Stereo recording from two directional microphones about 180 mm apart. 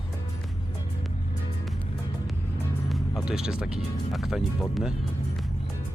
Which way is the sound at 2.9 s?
Centre (ahead or behind).